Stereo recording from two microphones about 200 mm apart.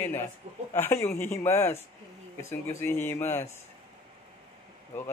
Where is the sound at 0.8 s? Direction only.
15° left (ahead or behind).